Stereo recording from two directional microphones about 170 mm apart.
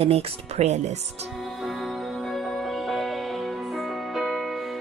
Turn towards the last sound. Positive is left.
turn(degrees=0)  # may be behind; listen again after turning